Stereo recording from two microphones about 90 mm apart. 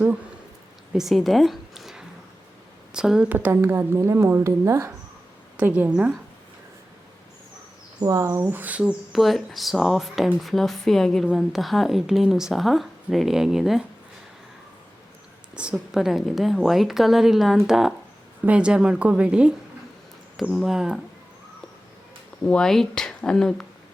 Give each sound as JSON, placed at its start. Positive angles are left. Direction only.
{"t": 0.9, "sound": "a woman's voice", "side_deg": 0}
{"t": 3.2, "sound": "a woman's voice", "side_deg": -20}
{"t": 5.5, "sound": "a woman's voice", "side_deg": -20}
{"t": 8.0, "sound": "speech", "side_deg": -40}
{"t": 8.5, "sound": "a woman's voice", "side_deg": -15}
{"t": 9.1, "sound": "speech", "side_deg": 0}
{"t": 15.5, "sound": "a woman's voice", "side_deg": -10}
{"t": 22.4, "sound": "speech", "side_deg": 10}